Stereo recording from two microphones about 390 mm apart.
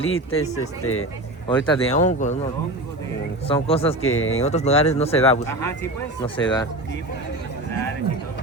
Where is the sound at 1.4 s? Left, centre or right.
Centre.